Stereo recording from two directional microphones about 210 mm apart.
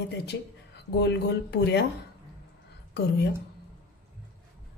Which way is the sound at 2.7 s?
55° left (ahead or behind).